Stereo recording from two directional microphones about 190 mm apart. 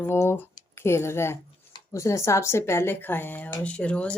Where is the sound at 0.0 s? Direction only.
15° left (ahead or behind).